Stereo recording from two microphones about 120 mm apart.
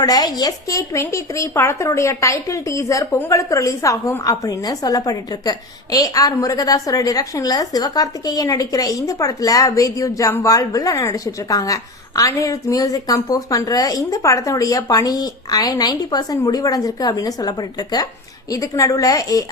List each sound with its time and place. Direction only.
0.0 s speech: 30° left (ahead or behind)